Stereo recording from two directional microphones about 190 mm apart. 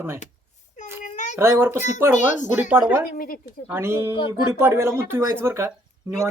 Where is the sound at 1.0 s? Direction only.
40° left (ahead or behind).